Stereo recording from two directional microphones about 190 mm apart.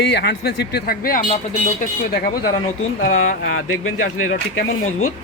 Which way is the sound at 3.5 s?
90° left.